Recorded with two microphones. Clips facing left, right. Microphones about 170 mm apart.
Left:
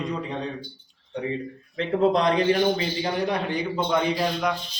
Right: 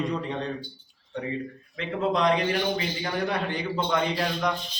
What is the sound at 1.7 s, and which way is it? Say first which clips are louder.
Speech: left 5 dB; 35° left (ahead or behind).